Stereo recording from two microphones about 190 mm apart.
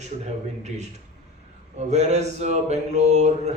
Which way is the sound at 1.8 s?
35° right (ahead or behind).